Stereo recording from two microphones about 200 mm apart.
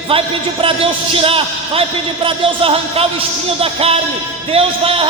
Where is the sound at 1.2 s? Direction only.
30° right (ahead or behind).